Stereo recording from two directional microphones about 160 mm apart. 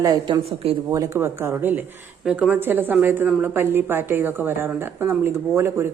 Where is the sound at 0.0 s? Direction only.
25° right (ahead or behind).